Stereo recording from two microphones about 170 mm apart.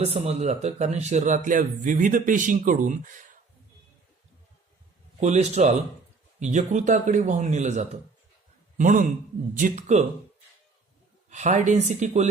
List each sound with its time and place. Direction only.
0.0 s speech: 40° right (ahead or behind)
5.2 s speech: 40° right (ahead or behind)
11.3 s speech: 45° right (ahead or behind)